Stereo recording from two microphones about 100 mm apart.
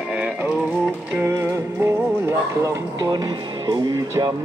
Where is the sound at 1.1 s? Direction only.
25° right (ahead or behind).